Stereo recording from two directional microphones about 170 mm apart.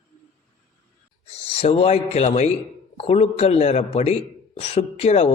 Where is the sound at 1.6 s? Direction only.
40° left (ahead or behind).